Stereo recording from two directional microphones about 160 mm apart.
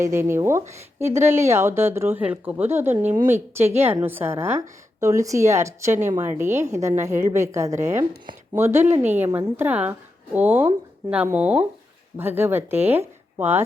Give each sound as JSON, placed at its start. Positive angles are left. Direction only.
{"t": 0.0, "sound": "a woman's voice", "side_deg": -15}